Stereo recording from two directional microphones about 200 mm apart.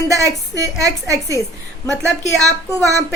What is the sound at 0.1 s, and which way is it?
A woman's voice, 15° right (ahead or behind).